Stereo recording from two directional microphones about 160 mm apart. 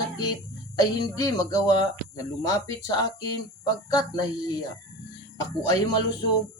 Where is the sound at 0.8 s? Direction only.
25° left (ahead or behind).